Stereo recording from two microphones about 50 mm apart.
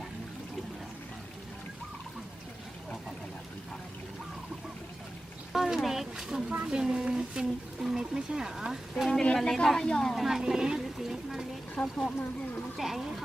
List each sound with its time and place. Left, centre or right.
5.5 s speech: centre
9.2 s a woman's voice: centre
10.2 s speech: centre
11.7 s speech: left
12.7 s speech: centre